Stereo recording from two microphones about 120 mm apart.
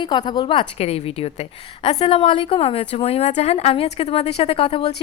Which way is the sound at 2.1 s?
45° left (ahead or behind).